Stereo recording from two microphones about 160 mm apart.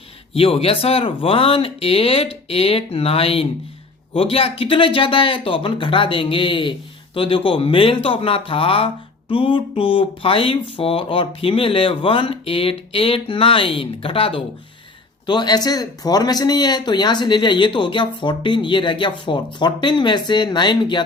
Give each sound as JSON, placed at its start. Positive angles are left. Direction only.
{"t": 0.3, "sound": "speech", "side_deg": 35}